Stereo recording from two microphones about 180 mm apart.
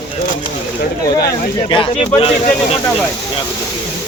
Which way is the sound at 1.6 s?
25° left (ahead or behind).